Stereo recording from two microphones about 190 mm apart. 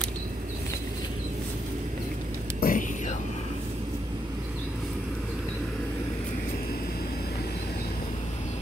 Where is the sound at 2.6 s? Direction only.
45° left (ahead or behind).